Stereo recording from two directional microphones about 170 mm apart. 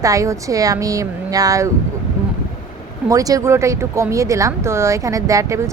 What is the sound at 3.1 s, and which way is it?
Speech, 20° right (ahead or behind).